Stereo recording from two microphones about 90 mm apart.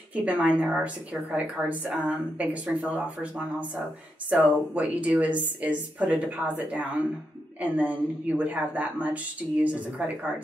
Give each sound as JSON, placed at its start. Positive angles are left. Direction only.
{"t": 0.1, "sound": "a woman's voice", "side_deg": -15}